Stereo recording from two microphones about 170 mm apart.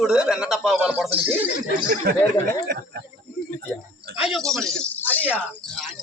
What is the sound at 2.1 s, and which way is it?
Speech, 60° right (ahead or behind).